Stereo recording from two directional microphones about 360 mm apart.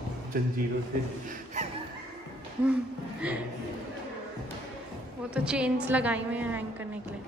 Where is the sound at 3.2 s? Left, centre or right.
Centre.